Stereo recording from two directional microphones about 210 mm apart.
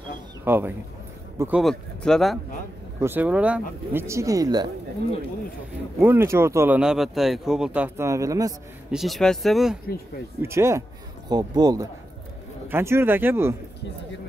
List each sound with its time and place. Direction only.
0.5 s speech: 10° right (ahead or behind)
3.0 s speech: 10° right (ahead or behind)
5.9 s speech: 10° right (ahead or behind)
8.9 s speech: centre (ahead or behind)
10.4 s speech: 15° right (ahead or behind)